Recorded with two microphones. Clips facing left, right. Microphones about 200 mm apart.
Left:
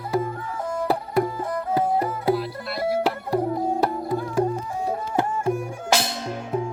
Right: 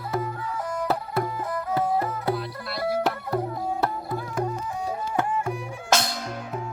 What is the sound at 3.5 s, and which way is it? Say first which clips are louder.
Tabla: left 5 dB; 30° left (ahead or behind).